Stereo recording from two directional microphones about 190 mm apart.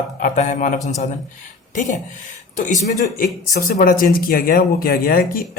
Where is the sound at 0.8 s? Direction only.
15° left (ahead or behind).